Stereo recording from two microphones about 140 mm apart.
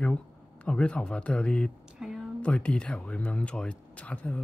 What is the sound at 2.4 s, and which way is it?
Speech, 10° left (ahead or behind).